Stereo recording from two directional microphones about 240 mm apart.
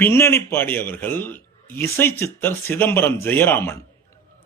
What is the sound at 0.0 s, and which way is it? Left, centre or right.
A man's voice, centre.